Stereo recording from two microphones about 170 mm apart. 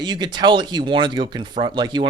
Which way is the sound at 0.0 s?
25° right (ahead or behind).